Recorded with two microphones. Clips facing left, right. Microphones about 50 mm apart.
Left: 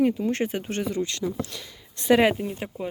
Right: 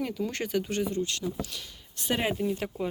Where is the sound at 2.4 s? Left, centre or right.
Centre.